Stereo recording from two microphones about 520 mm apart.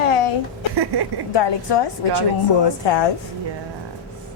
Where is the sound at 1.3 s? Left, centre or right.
Left.